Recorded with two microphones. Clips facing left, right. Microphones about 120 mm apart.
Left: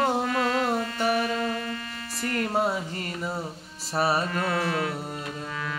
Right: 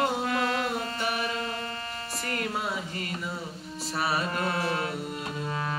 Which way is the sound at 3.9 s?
35° left (ahead or behind).